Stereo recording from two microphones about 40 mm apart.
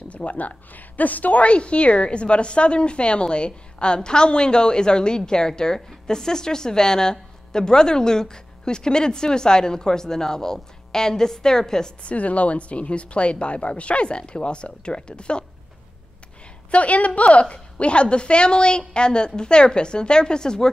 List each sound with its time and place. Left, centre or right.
0.1 s a woman's voice: left; by 11.9 s centre
12.0 s a woman's voice: left
16.7 s a woman's voice: left; by 20.7 s centre